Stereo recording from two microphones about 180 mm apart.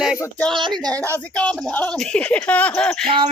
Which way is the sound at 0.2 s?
10° left (ahead or behind).